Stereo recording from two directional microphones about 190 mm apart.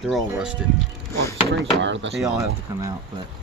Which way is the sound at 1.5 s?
70° right (ahead or behind).